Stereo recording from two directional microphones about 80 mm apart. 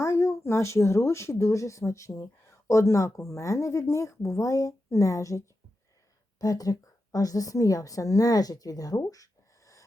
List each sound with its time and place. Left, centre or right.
0.0 s speech: left
6.4 s a woman's voice: left